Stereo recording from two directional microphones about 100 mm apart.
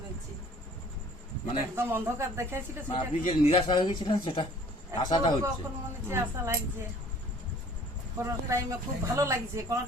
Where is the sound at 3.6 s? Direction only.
50° left (ahead or behind).